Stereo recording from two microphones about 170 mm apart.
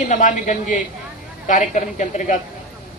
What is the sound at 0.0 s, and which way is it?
Speech, 50° left (ahead or behind).